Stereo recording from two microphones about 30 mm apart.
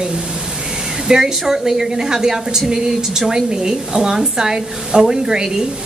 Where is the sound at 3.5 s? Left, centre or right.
Right.